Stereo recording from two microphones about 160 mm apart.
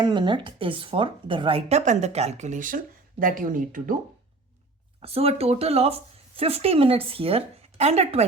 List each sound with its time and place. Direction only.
0.0 s speech: 30° right (ahead or behind)
1.8 s speech: 45° right (ahead or behind)
4.9 s speech: 40° right (ahead or behind)